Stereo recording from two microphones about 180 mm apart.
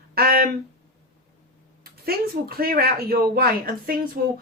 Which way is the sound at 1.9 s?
55° right (ahead or behind).